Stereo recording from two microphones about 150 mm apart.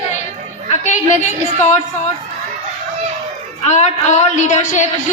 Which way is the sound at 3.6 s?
50° left (ahead or behind).